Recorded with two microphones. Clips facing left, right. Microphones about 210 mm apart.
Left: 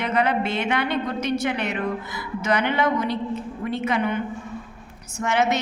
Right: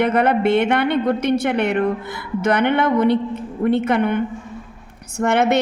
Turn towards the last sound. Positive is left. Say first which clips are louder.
# right 5 dB
turn(degrees=-60)  # may be behind; listen again after turning